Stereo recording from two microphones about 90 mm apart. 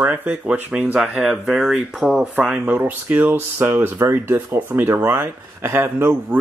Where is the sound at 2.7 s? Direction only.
20° right (ahead or behind).